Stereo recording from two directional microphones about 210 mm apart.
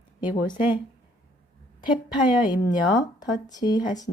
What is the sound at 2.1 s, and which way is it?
Speech, 5° right (ahead or behind).